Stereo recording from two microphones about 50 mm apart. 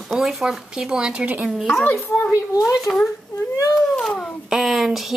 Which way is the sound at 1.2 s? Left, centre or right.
Right.